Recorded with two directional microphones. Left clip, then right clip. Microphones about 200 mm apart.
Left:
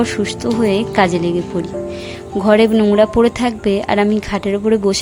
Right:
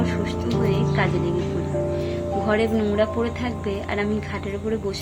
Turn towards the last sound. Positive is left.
turn(degrees=50)  # may be behind; listen again after turning